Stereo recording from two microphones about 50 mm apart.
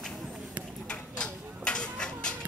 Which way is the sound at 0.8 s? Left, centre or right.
Centre.